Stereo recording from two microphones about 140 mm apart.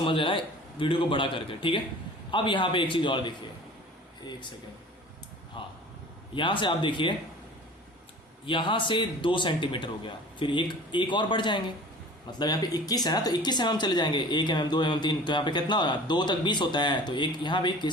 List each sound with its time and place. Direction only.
0.0 s speech: 35° left (ahead or behind)
5.6 s speech: 35° left (ahead or behind)
8.4 s speech: 35° left (ahead or behind)